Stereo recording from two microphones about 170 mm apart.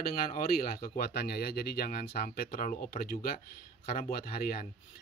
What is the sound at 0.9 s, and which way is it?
Speech, 65° left (ahead or behind).